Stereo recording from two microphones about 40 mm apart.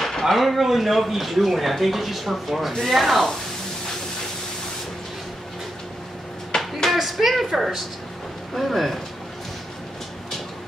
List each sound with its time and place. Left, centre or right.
0.0 s speech: centre
6.6 s a sound: centre
8.5 s speech: centre